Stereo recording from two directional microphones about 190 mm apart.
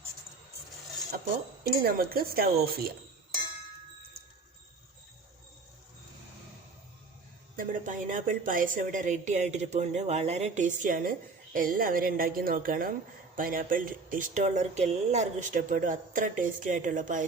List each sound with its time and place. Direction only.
1.8 s speech: 50° right (ahead or behind)
7.5 s a woman's voice: 45° right (ahead or behind)